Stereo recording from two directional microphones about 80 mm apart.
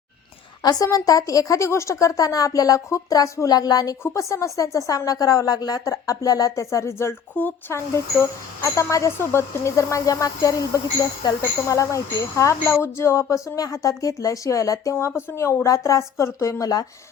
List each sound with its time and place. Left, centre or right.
0.6 s a woman's voice: left
4.0 s a woman's voice: left